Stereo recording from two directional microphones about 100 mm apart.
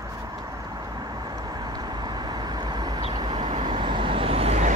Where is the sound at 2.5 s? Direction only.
45° right (ahead or behind).